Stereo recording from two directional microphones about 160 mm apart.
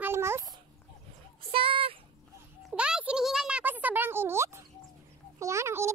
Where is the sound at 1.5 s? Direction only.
35° right (ahead or behind).